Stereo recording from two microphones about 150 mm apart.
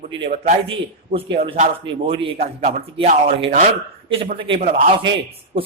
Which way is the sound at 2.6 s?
50° right (ahead or behind).